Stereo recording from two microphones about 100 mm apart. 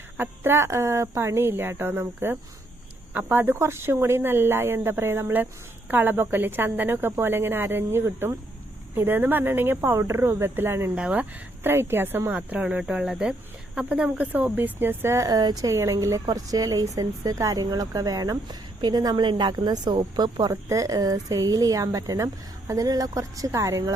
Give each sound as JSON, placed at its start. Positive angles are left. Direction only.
{"t": 0.2, "sound": "a woman's voice", "side_deg": -25}
{"t": 10.9, "sound": "speech", "side_deg": -15}
{"t": 15.3, "sound": "a woman's voice", "side_deg": -45}
{"t": 20.5, "sound": "a woman's voice", "side_deg": -35}